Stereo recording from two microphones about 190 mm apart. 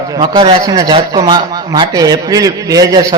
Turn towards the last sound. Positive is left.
turn(degrees=-20)  # may be behind; listen again after turning